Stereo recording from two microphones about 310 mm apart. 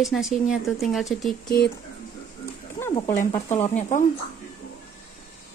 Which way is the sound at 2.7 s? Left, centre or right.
Centre.